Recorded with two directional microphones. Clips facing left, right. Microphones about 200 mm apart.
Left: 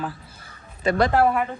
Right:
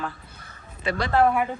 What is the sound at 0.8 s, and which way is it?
Speech, 45° left (ahead or behind).